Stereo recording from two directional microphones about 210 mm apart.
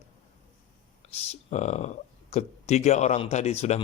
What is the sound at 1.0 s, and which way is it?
A man's voice, 35° left (ahead or behind).